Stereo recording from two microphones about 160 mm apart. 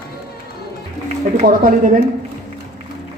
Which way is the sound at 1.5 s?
60° right (ahead or behind).